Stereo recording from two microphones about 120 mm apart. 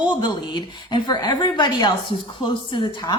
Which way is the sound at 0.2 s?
40° left (ahead or behind).